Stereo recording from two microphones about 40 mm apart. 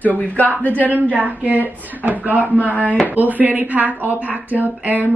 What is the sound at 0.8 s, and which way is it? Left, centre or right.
A woman's voice, right.